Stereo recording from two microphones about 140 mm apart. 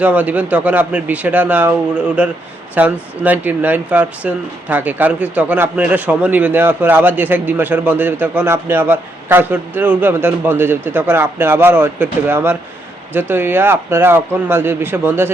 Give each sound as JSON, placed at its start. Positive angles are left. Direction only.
{"t": 0.0, "sound": "speech", "side_deg": -10}